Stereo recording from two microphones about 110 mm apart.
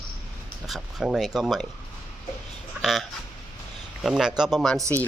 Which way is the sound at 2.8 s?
Centre (ahead or behind).